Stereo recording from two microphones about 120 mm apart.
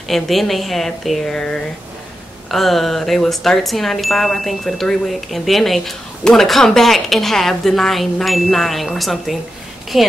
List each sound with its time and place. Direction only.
0.1 s speech: centre (ahead or behind)